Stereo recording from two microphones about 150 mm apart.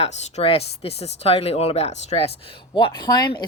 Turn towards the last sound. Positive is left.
turn(degrees=30)  # may be behind; listen again after turning